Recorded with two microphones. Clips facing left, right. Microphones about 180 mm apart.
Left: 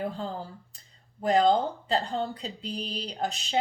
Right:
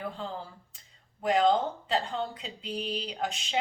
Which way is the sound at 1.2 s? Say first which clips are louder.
Left 2 dB; 35° left (ahead or behind).